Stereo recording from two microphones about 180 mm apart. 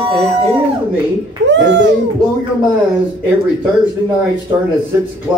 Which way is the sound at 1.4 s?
80° right.